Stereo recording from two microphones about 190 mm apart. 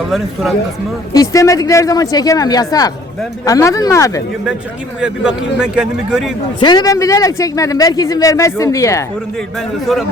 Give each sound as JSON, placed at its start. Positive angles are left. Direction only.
{"t": 1.1, "sound": "speech", "side_deg": 15}
{"t": 4.9, "sound": "a man's voice", "side_deg": -5}
{"t": 6.6, "sound": "speech", "side_deg": 20}
{"t": 9.8, "sound": "a man's voice", "side_deg": 0}